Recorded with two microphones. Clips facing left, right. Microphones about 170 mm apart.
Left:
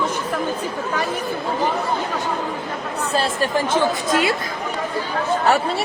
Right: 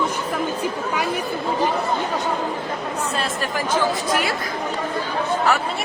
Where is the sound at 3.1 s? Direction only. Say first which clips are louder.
Left 4 dB; 30° left (ahead or behind).